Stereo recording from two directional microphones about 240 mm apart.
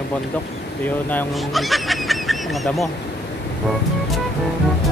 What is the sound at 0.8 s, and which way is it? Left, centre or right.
Speech, centre.